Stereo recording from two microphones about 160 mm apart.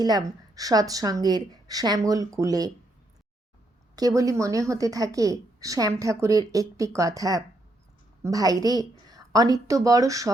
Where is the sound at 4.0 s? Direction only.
20° right (ahead or behind).